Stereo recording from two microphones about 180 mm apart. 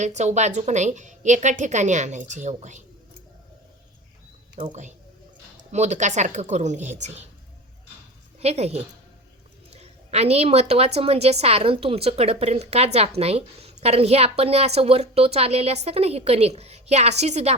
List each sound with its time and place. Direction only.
0.0 s a woman's voice: 40° right (ahead or behind)
4.6 s a woman's voice: 40° right (ahead or behind)
8.4 s a woman's voice: 35° right (ahead or behind)